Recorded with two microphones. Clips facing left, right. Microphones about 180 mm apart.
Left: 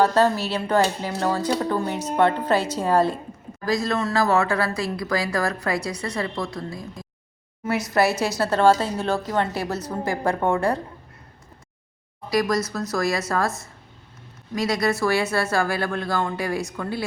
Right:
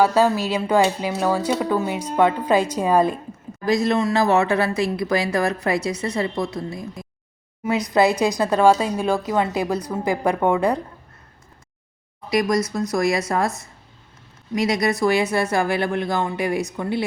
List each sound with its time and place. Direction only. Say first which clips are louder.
0.0 s speech: right 2 dB; 10° right (ahead or behind)
12.3 s speech: right 2 dB; 20° right (ahead or behind)
14.5 s speech: right 2 dB; 20° right (ahead or behind)